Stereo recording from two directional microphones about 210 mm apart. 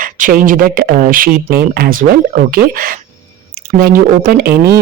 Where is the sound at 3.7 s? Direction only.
45° right (ahead or behind).